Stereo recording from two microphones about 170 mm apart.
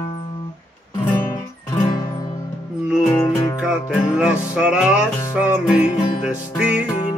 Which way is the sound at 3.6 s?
5° right (ahead or behind).